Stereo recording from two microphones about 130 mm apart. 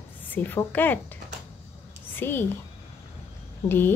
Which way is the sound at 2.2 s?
15° left (ahead or behind).